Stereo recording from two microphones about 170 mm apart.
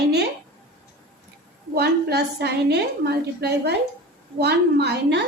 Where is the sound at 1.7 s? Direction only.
70° right (ahead or behind).